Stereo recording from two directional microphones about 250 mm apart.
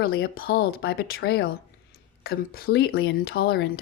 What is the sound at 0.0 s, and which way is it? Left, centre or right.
Speech, left.